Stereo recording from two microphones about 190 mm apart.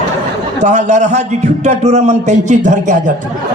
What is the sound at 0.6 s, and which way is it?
A man's voice, 35° right (ahead or behind).